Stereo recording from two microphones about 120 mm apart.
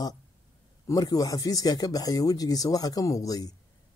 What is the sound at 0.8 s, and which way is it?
A man's voice, 30° left (ahead or behind).